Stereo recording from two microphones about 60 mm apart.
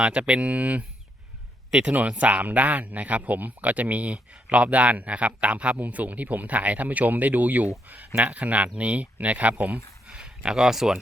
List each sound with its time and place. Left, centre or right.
0.0 s speech: centre